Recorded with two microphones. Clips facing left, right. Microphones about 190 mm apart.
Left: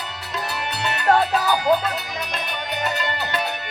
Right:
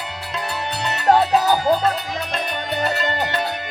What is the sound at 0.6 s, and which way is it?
Music, 35° right (ahead or behind).